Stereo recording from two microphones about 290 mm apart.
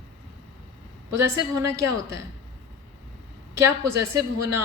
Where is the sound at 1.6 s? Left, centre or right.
Right.